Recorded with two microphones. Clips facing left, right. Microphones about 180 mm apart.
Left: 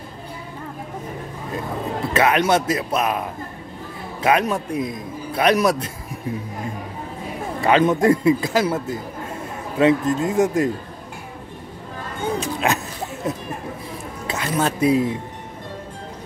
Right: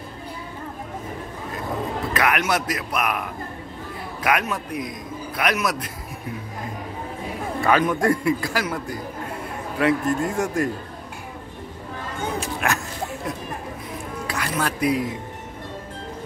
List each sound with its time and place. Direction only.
2.1 s a man's voice: 25° left (ahead or behind)
7.6 s a man's voice: 20° left (ahead or behind)
12.4 s music: 20° left (ahead or behind)
14.2 s speech: 25° left (ahead or behind)